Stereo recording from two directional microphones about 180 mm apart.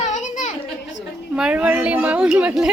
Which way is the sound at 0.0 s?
40° left (ahead or behind).